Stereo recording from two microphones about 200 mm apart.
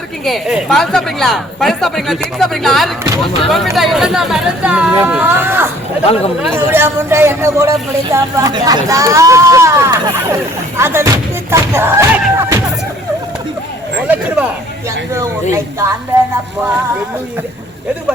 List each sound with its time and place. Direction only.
0.3 s speech: centre (ahead or behind)
6.0 s speech: 30° left (ahead or behind)
6.5 s speech: 10° right (ahead or behind)
14.1 s a sound: 5° right (ahead or behind)